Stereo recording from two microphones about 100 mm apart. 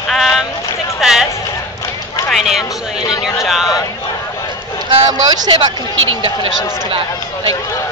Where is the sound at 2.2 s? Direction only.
5° right (ahead or behind).